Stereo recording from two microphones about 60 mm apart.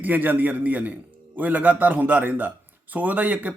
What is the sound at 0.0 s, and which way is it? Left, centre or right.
Speech, right.